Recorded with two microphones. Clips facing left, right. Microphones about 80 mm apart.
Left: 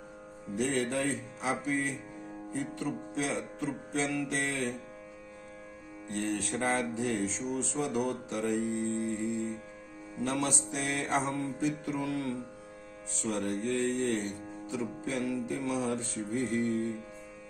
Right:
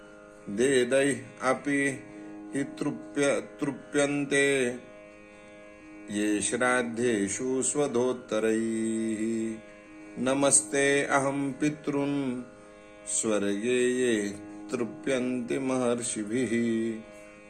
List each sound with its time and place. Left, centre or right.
0.5 s speech: right
6.1 s speech: right
13.2 s music: right